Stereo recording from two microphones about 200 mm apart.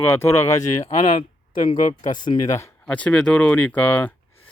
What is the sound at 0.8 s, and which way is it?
Speech, 25° left (ahead or behind).